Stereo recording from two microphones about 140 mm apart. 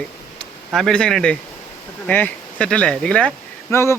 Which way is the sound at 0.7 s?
Centre (ahead or behind).